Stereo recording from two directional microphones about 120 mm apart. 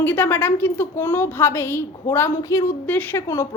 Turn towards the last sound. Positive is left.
turn(degrees=25)  # may be behind; listen again after turning